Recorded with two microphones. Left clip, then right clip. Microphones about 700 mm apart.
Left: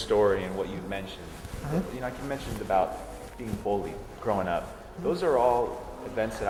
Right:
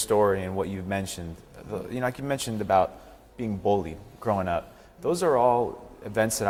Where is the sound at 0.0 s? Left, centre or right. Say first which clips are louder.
Right 1 dB; right.